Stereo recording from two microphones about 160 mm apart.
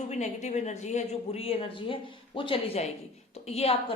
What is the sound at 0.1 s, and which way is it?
Speech, 45° left (ahead or behind).